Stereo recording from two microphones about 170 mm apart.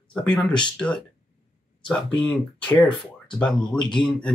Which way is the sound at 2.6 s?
10° left (ahead or behind).